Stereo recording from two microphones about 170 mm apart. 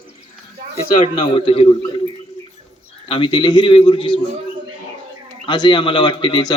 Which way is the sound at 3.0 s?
30° left (ahead or behind).